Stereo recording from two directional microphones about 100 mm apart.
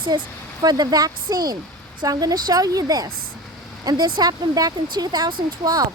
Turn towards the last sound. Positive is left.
turn(degrees=-40)  # may be behind; listen again after turning